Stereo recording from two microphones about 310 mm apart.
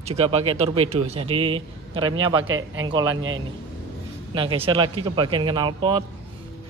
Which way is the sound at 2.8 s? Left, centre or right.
Centre.